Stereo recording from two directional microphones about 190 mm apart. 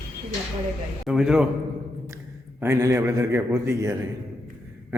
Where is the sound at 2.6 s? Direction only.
15° right (ahead or behind).